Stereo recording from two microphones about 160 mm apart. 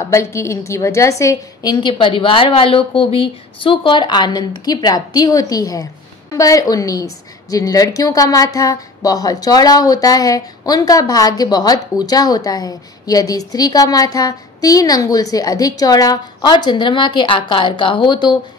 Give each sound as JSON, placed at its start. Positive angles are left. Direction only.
{"t": 0.0, "sound": "a woman's voice", "side_deg": 20}